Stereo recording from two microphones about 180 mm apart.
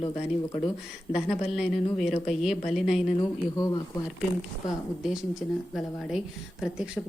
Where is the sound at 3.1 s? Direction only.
20° left (ahead or behind).